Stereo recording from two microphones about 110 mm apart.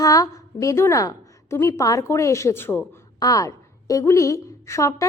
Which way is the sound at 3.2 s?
35° left (ahead or behind).